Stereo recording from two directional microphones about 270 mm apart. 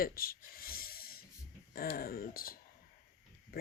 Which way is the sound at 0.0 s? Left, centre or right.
Left.